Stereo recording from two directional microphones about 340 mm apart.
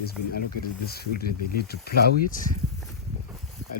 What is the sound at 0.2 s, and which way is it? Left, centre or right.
Speech, left.